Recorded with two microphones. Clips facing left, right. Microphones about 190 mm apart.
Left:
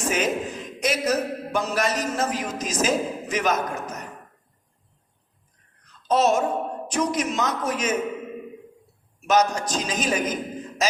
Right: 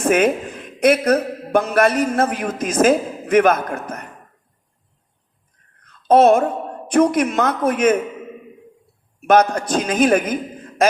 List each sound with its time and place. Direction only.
0.0 s a man's voice: 55° right (ahead or behind)
5.8 s a woman's voice: 55° right (ahead or behind)
9.2 s a man's voice: 55° right (ahead or behind)